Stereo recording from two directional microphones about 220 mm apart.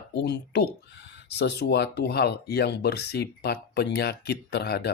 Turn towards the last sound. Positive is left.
turn(degrees=45)  # may be behind; listen again after turning